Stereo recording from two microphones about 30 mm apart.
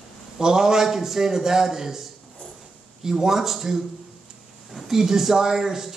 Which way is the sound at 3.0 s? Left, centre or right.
Centre.